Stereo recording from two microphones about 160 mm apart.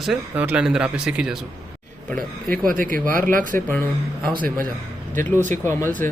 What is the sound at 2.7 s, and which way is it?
Speech, 60° right (ahead or behind).